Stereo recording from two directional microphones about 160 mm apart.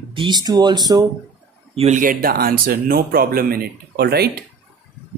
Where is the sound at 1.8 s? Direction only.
55° right (ahead or behind); by 4.4 s 90° right.